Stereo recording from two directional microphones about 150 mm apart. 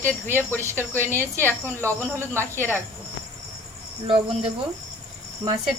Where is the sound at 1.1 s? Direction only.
15° left (ahead or behind).